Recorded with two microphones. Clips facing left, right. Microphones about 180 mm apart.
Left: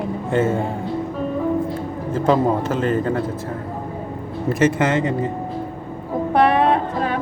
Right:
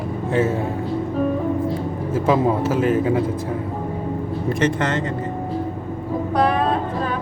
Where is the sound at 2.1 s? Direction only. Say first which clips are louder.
Left 1 dB; 5° right (ahead or behind).